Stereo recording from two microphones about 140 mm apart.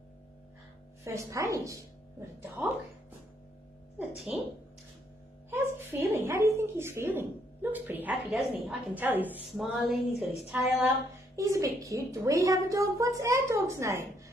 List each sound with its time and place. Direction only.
1.0 s a woman's voice: 20° right (ahead or behind)
5.5 s a woman's voice: 15° right (ahead or behind)
8.3 s a woman's voice: centre (ahead or behind)
8.6 s a woman's voice: 10° right (ahead or behind)
9.6 s a woman's voice: centre (ahead or behind)
11.3 s a woman's voice: 20° right (ahead or behind)